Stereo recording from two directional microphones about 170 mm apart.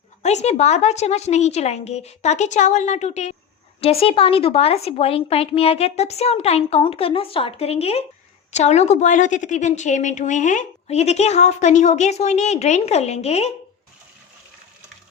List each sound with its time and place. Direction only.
0.2 s a woman's voice: 40° left (ahead or behind)